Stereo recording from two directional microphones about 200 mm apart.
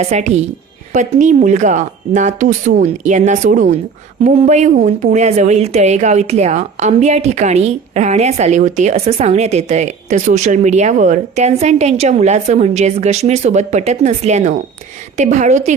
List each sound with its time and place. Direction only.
0.0 s a woman's voice: 35° right (ahead or behind)